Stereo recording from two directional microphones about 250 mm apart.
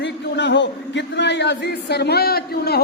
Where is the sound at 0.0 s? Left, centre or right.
Left.